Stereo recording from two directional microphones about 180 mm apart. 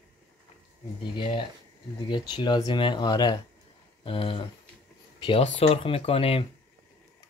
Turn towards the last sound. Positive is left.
turn(degrees=30)  # may be behind; listen again after turning